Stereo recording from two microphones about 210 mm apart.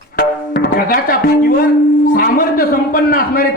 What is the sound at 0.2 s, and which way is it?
Music, 45° left (ahead or behind).